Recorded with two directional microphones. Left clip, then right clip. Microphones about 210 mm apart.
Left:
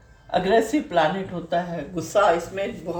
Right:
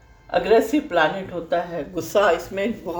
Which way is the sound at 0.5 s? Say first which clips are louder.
Right 2 dB; 35° right (ahead or behind).